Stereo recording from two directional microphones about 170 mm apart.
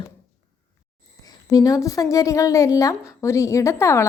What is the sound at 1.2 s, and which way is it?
A woman's voice, 20° left (ahead or behind).